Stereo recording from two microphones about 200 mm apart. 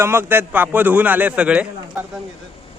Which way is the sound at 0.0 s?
10° right (ahead or behind).